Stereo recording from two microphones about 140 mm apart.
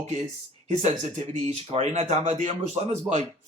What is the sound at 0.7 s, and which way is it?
Speech, 55° right (ahead or behind).